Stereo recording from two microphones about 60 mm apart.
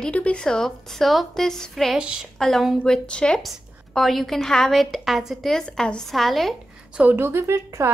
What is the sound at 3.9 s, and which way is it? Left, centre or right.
A woman's voice, centre.